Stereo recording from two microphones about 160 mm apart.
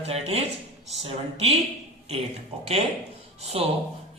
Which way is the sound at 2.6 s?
40° right (ahead or behind).